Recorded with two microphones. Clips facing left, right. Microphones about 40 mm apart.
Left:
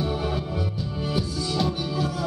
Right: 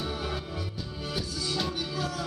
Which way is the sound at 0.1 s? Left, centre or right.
Centre.